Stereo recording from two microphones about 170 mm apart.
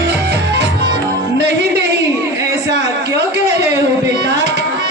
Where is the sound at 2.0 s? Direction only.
20° right (ahead or behind).